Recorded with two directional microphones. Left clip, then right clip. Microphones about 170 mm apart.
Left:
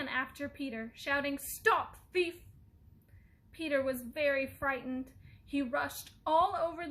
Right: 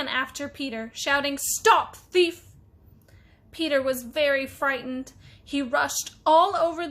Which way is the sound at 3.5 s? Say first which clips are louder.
Right 9 dB; 50° right (ahead or behind).